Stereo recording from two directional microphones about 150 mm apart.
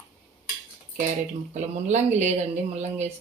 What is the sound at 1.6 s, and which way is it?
Speech, 50° right (ahead or behind).